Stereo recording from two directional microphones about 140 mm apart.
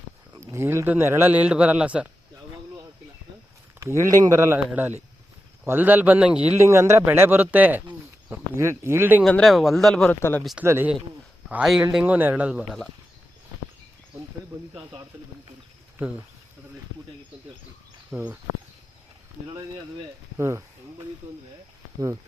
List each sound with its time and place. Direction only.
0.3 s a man's voice: 20° right (ahead or behind)
3.8 s a man's voice: 20° right (ahead or behind)
6.6 s a man's voice: 20° right (ahead or behind)
9.2 s speech: 5° left (ahead or behind)
10.2 s speech: 15° left (ahead or behind)
10.6 s a man's voice: 15° right (ahead or behind)
11.4 s a man's voice: 5° right (ahead or behind)
16.0 s speech: 10° right (ahead or behind)
18.1 s a man's voice: 10° right (ahead or behind)
20.4 s a man's voice: 20° right (ahead or behind)